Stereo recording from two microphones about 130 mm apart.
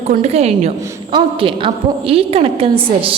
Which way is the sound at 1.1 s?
40° right (ahead or behind).